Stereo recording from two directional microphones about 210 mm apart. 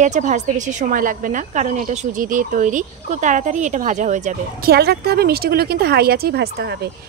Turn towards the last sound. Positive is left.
turn(degrees=-45)  # may be behind; listen again after turning